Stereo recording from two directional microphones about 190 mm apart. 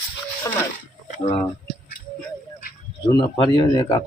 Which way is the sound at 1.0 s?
40° left (ahead or behind).